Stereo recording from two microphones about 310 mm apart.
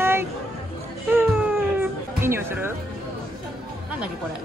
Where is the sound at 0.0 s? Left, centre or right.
Centre.